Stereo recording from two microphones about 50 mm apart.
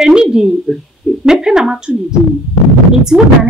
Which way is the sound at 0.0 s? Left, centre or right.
Centre.